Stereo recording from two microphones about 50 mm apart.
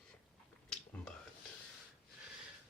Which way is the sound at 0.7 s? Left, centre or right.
Centre.